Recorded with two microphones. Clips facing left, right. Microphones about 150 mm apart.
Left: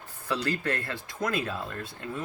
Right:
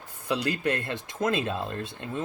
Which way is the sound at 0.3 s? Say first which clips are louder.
Right 2 dB; 15° right (ahead or behind).